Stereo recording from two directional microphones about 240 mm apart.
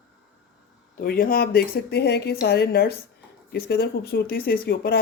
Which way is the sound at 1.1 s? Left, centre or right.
Left.